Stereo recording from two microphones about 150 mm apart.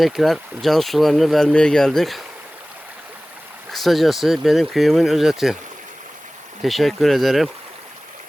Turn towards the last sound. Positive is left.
turn(degrees=0)  # may be behind; listen again after turning